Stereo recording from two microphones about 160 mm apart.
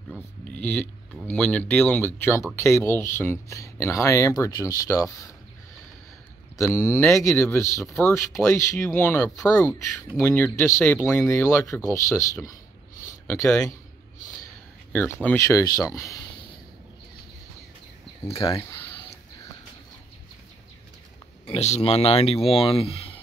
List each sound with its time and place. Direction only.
0.1 s speech: 5° left (ahead or behind)
6.5 s speech: 15° left (ahead or behind)
10.1 s speech: 10° left (ahead or behind)
13.5 s speech: 5° left (ahead or behind)
14.9 s speech: 10° left (ahead or behind)
18.3 s speech: 35° left (ahead or behind)
18.6 s a sound: 15° left (ahead or behind)
21.5 s speech: 45° left (ahead or behind)